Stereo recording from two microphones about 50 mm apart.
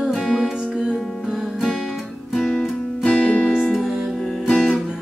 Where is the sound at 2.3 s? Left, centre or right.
Centre.